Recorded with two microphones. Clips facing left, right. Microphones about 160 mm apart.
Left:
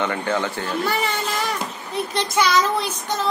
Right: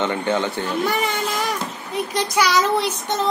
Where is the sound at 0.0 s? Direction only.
20° right (ahead or behind).